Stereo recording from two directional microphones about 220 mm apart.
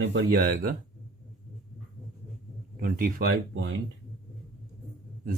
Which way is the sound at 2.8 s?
40° right (ahead or behind).